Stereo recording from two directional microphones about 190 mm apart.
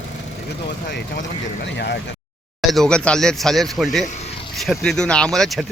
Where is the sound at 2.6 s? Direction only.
5° left (ahead or behind).